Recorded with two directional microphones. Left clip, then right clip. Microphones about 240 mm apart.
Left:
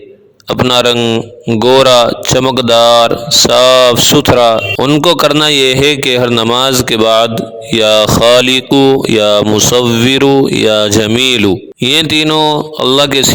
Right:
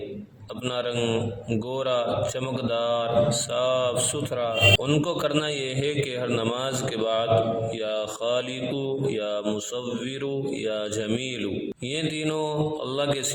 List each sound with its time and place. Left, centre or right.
0.7 s speech: left